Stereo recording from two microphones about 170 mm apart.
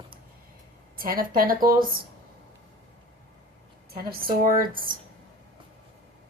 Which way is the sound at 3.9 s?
60° right (ahead or behind).